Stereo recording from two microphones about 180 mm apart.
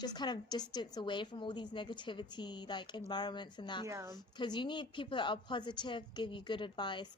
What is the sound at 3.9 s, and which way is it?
Speech, 15° right (ahead or behind).